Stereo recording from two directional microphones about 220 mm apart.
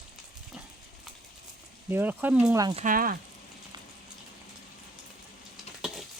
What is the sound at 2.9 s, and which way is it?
Speech, 40° right (ahead or behind).